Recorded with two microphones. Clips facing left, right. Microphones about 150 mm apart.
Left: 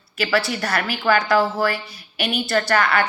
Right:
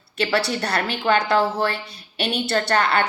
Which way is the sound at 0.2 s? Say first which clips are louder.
Even; 30° right (ahead or behind).